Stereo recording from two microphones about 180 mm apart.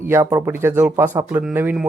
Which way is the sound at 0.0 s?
15° right (ahead or behind).